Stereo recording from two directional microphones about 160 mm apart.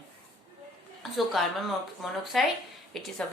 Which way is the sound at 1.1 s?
Centre (ahead or behind).